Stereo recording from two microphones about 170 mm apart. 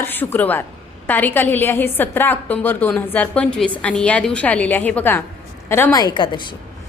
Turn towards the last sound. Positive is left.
turn(degrees=25)  # may be behind; listen again after turning